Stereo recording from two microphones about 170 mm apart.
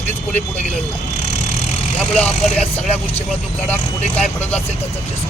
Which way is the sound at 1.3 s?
40° left (ahead or behind).